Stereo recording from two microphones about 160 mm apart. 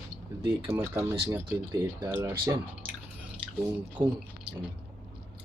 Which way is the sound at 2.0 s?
10° right (ahead or behind).